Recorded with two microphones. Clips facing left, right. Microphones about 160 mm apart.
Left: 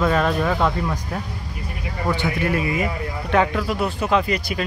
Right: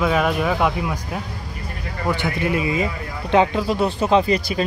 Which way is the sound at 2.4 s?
20° right (ahead or behind).